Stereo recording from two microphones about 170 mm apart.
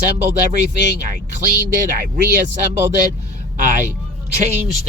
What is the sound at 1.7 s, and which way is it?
Speech, 50° right (ahead or behind).